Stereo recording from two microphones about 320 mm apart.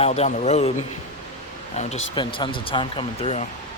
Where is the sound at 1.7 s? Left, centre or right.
Centre.